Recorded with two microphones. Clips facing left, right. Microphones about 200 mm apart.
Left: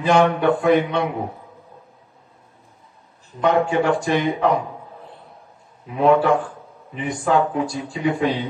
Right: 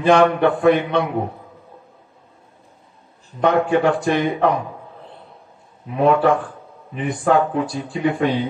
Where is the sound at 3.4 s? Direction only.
60° right (ahead or behind).